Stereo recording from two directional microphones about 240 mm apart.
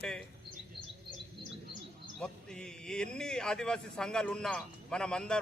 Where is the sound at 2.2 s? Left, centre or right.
Centre.